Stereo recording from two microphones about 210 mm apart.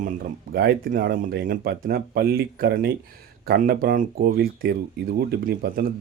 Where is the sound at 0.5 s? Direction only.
45° right (ahead or behind).